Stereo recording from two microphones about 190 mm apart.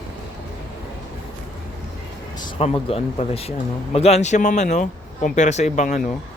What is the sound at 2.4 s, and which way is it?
Speech, 30° left (ahead or behind).